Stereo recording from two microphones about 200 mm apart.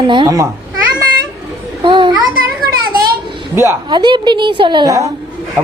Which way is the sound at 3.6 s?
20° right (ahead or behind).